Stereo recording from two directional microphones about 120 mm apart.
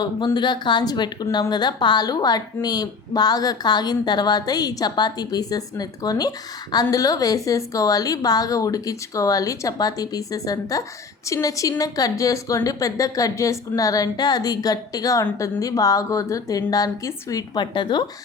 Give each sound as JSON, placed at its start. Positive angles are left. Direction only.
{"t": 0.3, "sound": "a woman's voice", "side_deg": 40}